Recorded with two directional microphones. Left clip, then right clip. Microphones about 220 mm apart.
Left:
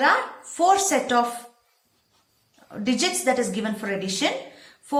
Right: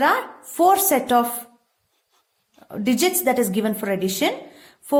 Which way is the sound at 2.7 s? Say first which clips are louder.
Right 3 dB; 45° right (ahead or behind).